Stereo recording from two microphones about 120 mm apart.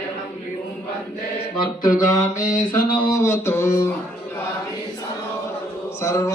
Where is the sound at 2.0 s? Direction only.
90° left.